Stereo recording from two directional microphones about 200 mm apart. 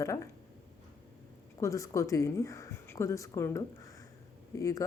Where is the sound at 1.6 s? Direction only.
15° left (ahead or behind).